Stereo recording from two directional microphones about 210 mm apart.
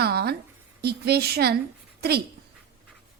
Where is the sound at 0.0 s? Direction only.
50° right (ahead or behind).